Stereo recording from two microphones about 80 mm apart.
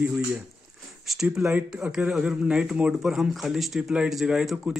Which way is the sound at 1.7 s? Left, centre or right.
Centre.